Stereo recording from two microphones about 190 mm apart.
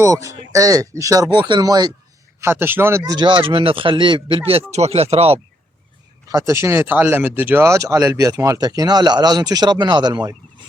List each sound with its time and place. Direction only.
0.0 s speech: 15° right (ahead or behind); by 5.4 s 30° right (ahead or behind)
6.2 s speech: 15° right (ahead or behind)